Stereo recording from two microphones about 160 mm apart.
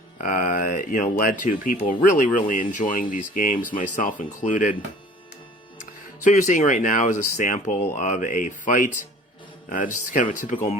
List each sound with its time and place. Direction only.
0.2 s speech: 55° left (ahead or behind)
6.2 s speech: 50° left (ahead or behind)